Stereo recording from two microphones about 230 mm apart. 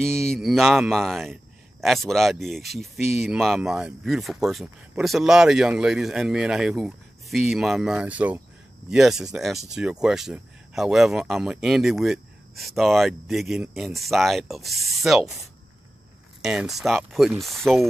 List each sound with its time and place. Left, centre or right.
0.3 s speech: centre
16.3 s speech: centre